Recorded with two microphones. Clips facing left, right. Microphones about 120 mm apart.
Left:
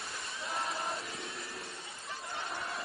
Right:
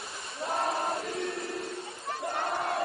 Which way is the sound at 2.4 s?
65° right (ahead or behind).